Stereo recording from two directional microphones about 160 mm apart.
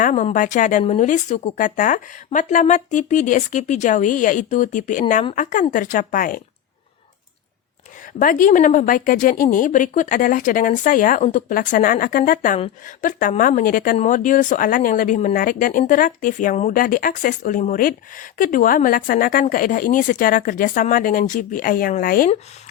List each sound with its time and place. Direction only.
0.0 s speech: 50° left (ahead or behind)
8.2 s speech: 60° left (ahead or behind)
12.5 s speech: 40° left (ahead or behind)
13.1 s speech: 55° left (ahead or behind)